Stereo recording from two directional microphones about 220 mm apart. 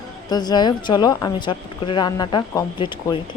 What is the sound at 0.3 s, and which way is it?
Speech, 20° left (ahead or behind).